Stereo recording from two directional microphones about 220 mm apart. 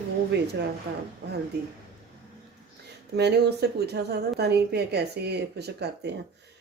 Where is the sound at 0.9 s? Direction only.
45° right (ahead or behind).